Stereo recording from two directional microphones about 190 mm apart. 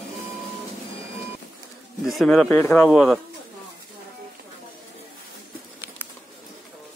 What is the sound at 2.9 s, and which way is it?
Speech, centre (ahead or behind).